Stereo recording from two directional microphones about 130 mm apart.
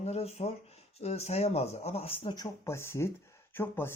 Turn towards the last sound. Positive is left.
turn(degrees=15)  # may be behind; listen again after turning